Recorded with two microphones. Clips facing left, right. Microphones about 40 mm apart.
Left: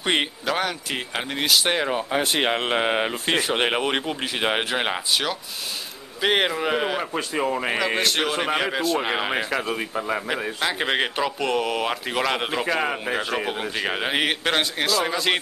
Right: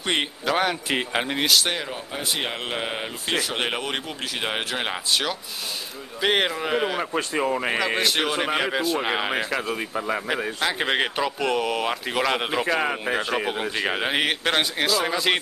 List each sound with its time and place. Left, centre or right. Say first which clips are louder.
0.0 s speech: left 2 dB; centre
0.5 s speech: right 6 dB; centre
1.5 s speech: left 2 dB; centre
1.8 s speech: left 8 dB; left
2.4 s speech: left 6 dB; left; by 15.3 s centre